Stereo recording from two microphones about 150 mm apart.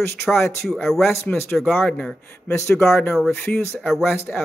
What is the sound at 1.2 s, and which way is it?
Speech, 10° left (ahead or behind).